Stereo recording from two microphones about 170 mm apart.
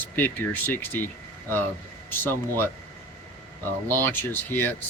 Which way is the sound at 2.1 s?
15° left (ahead or behind).